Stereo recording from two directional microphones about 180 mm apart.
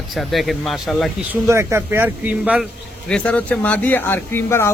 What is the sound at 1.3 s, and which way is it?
Speech, 15° right (ahead or behind).